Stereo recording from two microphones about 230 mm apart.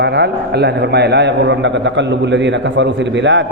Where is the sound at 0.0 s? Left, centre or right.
Right.